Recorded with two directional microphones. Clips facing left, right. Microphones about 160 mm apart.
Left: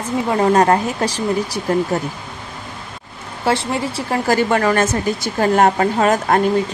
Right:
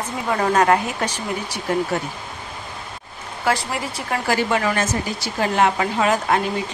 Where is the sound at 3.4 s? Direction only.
25° left (ahead or behind).